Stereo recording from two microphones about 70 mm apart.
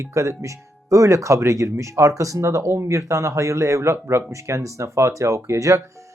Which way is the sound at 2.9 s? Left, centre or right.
Right.